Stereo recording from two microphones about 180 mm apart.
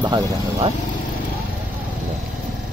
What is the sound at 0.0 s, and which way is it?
Speech, 25° right (ahead or behind).